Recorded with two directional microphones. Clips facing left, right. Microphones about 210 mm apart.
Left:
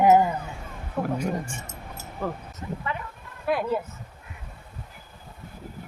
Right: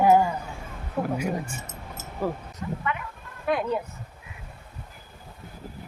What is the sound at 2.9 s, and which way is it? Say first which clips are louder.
Speech: left 1 dB; 30° left (ahead or behind).